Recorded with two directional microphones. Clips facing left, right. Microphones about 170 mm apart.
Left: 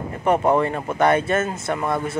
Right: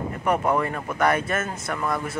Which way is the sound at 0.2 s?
25° left (ahead or behind).